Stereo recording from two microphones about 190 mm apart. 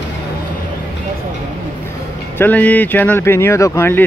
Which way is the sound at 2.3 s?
10° left (ahead or behind).